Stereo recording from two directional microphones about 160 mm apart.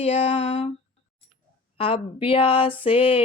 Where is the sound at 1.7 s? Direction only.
35° left (ahead or behind).